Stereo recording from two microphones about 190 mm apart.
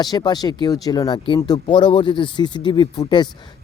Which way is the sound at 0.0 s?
20° left (ahead or behind).